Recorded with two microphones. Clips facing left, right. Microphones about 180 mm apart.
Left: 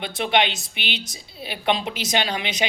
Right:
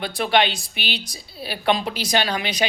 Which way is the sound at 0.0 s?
20° left (ahead or behind).